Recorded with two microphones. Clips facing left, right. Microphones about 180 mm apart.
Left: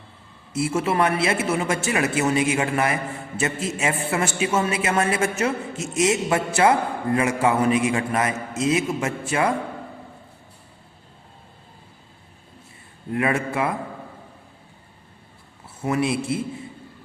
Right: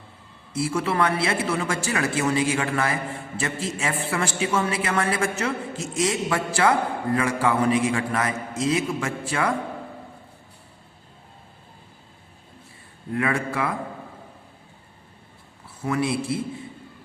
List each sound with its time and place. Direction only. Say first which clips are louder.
0.7 s a man's voice: left 2 dB; 25° left (ahead or behind)
13.1 s a man's voice: left 2 dB; 20° left (ahead or behind)
15.6 s a man's voice: left 2 dB; 25° left (ahead or behind)